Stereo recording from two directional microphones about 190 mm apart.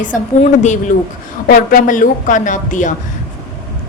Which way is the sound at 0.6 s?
40° left (ahead or behind).